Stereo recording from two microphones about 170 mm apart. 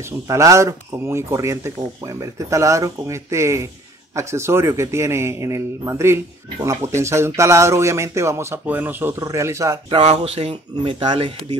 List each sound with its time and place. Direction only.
0.3 s a man's voice: 20° right (ahead or behind)
9.8 s speech: 35° right (ahead or behind)